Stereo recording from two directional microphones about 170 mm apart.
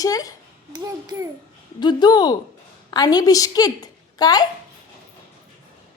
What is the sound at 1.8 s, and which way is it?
A woman's voice, 25° left (ahead or behind).